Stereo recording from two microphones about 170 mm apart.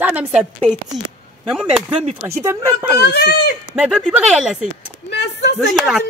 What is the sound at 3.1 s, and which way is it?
Speech, 70° left (ahead or behind).